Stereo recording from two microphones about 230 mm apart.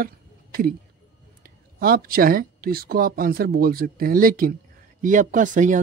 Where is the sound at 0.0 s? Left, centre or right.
Right.